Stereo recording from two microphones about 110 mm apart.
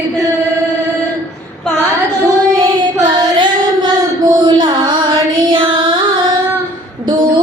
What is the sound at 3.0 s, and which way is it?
Child singing, 45° right (ahead or behind).